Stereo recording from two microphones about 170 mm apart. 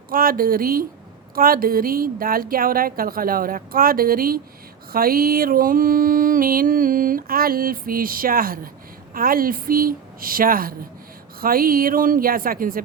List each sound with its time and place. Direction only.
0.1 s music: 60° right (ahead or behind)